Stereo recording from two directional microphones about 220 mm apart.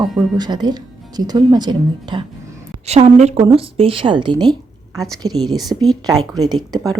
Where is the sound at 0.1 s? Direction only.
Centre (ahead or behind).